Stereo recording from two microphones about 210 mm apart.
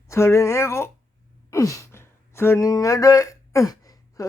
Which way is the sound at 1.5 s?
15° left (ahead or behind).